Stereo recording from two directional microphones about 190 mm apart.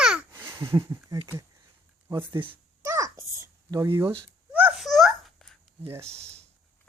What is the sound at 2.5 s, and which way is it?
Babbling, 15° right (ahead or behind).